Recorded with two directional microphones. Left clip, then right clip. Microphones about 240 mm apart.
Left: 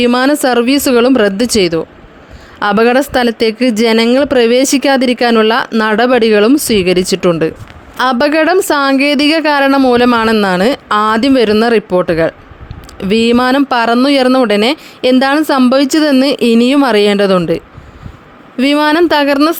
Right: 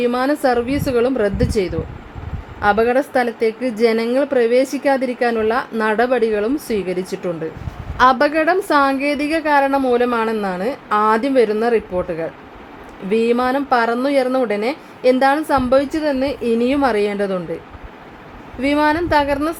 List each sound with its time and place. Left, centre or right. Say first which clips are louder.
0.0 s a woman's voice: left 7 dB; left
18.6 s a woman's voice: left 7 dB; left